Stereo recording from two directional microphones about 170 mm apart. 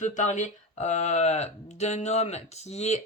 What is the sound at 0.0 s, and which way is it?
Speech, 45° left (ahead or behind).